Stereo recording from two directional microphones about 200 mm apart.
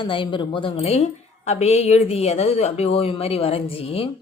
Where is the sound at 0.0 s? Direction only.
25° left (ahead or behind).